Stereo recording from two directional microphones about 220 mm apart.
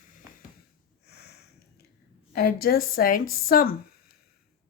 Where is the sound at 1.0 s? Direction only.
45° left (ahead or behind).